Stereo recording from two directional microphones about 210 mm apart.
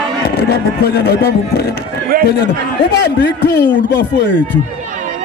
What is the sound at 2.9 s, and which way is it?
Speech, 55° left (ahead or behind).